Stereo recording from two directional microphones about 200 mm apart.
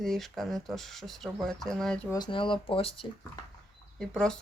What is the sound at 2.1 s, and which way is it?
Speech, 20° left (ahead or behind).